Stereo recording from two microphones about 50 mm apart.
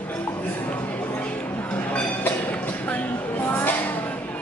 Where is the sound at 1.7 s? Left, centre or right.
Left.